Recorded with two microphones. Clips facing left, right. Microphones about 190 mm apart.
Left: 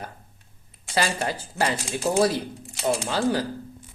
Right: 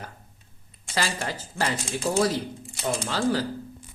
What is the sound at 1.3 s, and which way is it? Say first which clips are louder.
Speech: left 3 dB; 10° left (ahead or behind).